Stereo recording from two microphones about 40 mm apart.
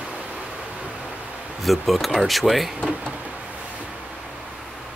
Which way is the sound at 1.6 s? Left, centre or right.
Centre.